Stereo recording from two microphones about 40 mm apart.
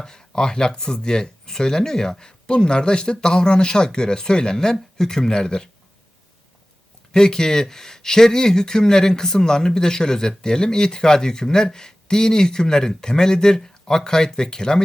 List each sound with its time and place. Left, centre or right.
0.0 s speech: centre
7.1 s speech: centre